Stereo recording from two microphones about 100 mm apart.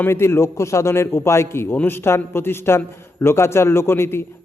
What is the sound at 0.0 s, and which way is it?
A man's voice, 25° left (ahead or behind).